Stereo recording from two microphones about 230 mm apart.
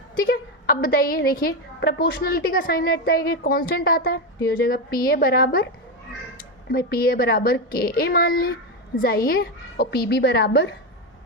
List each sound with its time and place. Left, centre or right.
0.2 s a woman's voice: left